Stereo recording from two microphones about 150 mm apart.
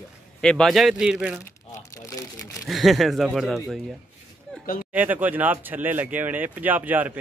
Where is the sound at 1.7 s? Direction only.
20° left (ahead or behind).